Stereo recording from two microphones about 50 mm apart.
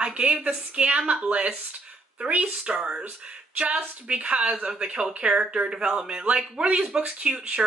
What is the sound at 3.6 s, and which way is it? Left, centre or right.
A woman's voice, right.